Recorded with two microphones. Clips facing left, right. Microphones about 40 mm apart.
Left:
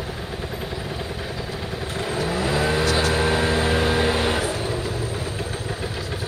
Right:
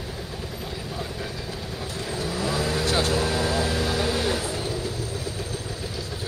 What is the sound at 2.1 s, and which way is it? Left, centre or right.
Vehicle, left.